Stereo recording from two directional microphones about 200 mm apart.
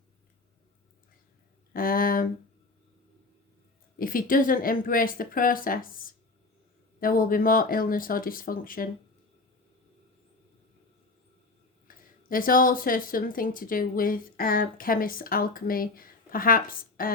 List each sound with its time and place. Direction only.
1.7 s speech: 45° left (ahead or behind)
3.9 s speech: 45° left (ahead or behind)
7.0 s speech: 45° left (ahead or behind)
11.9 s speech: 45° left (ahead or behind)